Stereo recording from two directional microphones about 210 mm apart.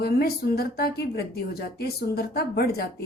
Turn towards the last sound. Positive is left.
turn(degrees=50)  # may be behind; listen again after turning